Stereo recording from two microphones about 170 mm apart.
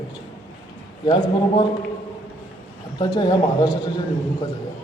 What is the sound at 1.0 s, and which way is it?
Speech, 30° left (ahead or behind).